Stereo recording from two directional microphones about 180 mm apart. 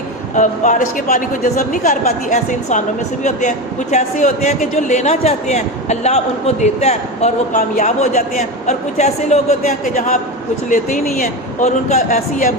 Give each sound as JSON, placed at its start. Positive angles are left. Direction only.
{"t": 0.3, "sound": "speech", "side_deg": 45}
{"t": 3.9, "sound": "a man's voice", "side_deg": 40}